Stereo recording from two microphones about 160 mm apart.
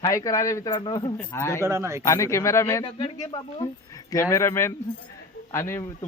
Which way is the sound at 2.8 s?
30° left (ahead or behind).